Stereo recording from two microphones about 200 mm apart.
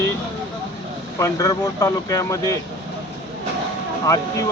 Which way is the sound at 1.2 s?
15° left (ahead or behind).